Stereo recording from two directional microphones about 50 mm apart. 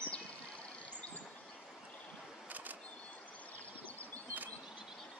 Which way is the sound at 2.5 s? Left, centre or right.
Right.